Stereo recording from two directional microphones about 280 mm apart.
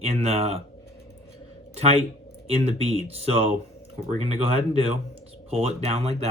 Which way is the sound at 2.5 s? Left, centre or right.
Right.